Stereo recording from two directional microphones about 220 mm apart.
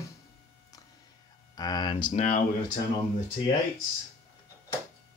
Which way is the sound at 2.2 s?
35° left (ahead or behind).